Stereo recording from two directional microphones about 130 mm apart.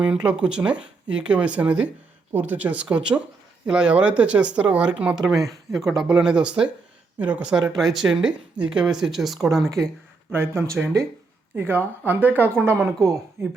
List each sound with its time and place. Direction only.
0.0 s speech: 5° right (ahead or behind)
5.2 s speech: 25° right (ahead or behind)
6.0 s speech: 5° right (ahead or behind)
10.3 s speech: 20° right (ahead or behind)